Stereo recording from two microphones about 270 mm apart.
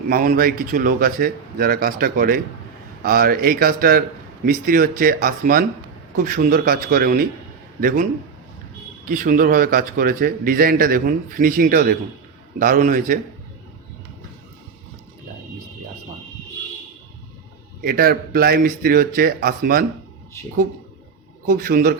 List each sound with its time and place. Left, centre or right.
0.1 s a man's voice: right
9.0 s a man's voice: right
17.8 s a man's voice: right
21.4 s a man's voice: right